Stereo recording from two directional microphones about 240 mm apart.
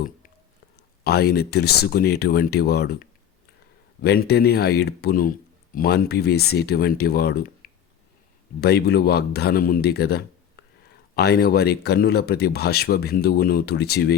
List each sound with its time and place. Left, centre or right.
0.8 s speech: left